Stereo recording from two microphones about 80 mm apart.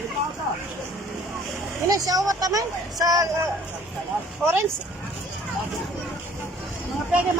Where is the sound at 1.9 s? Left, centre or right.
Right.